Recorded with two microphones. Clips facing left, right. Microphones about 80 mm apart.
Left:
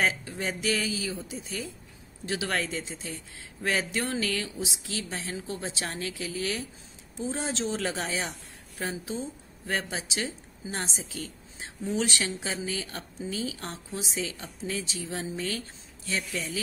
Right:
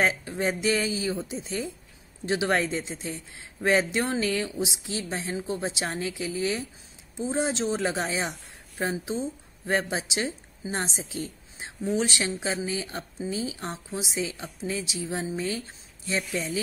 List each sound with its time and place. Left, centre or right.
0.0 s a woman's voice: right; by 15.1 s centre
15.1 s speech: right